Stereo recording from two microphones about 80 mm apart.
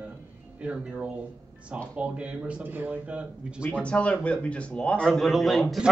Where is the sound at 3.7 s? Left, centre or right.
Centre.